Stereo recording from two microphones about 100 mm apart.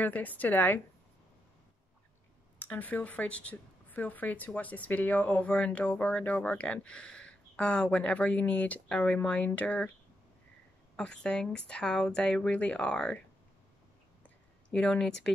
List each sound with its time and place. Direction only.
0.0 s speech: 15° left (ahead or behind)
2.6 s speech: 15° left (ahead or behind)
11.0 s speech: 10° left (ahead or behind)
14.2 s a sound: 10° left (ahead or behind)